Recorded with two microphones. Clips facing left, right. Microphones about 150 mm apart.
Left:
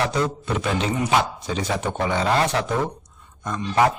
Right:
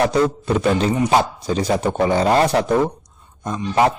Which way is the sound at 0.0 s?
40° right (ahead or behind).